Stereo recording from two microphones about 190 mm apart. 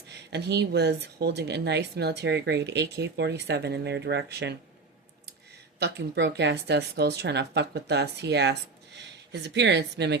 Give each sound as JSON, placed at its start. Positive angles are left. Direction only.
{"t": 0.3, "sound": "speech", "side_deg": -60}
{"t": 5.8, "sound": "speech", "side_deg": -65}